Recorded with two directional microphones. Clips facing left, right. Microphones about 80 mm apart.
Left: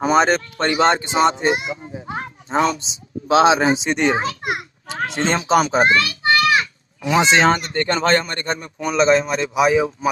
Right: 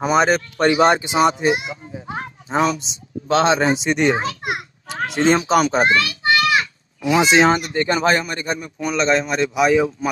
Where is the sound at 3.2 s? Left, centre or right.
Centre.